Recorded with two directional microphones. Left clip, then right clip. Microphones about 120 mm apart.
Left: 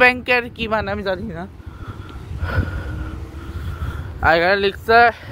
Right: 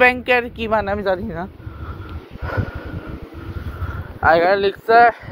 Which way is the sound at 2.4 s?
35° left (ahead or behind).